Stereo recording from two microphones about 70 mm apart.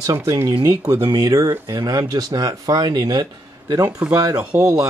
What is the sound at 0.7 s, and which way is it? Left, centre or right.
Speech, right.